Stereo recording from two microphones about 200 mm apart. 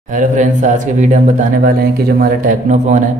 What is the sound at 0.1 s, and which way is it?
Speech, 40° right (ahead or behind).